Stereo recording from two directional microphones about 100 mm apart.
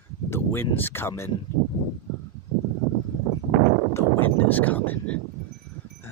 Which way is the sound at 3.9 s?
25° left (ahead or behind).